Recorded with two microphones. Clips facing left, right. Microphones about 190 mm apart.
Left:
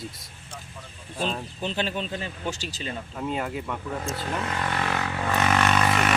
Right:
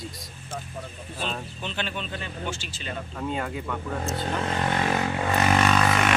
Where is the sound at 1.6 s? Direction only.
35° left (ahead or behind).